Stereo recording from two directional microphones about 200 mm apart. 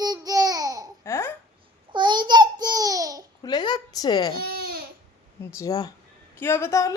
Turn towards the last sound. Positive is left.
turn(degrees=15)  # may be behind; listen again after turning